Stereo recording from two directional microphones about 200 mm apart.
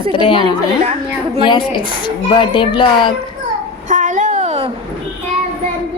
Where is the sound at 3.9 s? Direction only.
40° right (ahead or behind).